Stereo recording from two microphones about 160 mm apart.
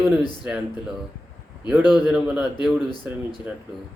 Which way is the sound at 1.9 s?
5° right (ahead or behind).